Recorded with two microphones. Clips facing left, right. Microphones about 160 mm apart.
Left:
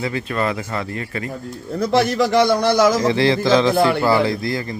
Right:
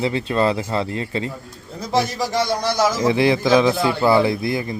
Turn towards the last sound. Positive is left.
turn(degrees=-20)  # may be behind; listen again after turning